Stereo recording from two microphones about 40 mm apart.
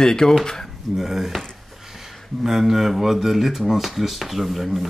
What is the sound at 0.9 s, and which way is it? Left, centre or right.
Speech, centre.